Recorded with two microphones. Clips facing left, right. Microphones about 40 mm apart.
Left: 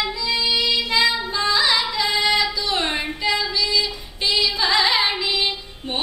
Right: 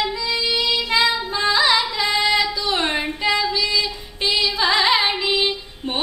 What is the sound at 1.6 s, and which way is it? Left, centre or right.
Carnatic music, centre.